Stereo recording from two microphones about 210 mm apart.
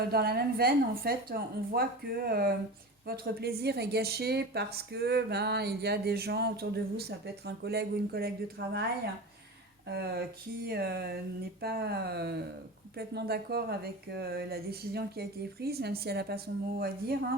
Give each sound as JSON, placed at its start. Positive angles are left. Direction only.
{"t": 0.0, "sound": "speech", "side_deg": -50}
{"t": 9.9, "sound": "speech", "side_deg": -50}